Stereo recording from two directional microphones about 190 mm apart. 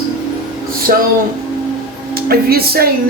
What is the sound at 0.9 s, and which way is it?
Speech, 50° right (ahead or behind).